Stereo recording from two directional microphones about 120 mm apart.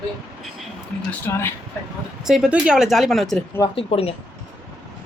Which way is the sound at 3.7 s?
55° left (ahead or behind).